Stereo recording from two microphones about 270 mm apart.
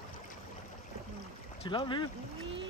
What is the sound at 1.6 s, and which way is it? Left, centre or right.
Speech, centre.